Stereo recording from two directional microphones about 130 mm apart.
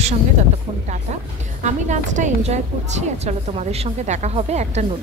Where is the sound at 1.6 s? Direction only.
65° right (ahead or behind).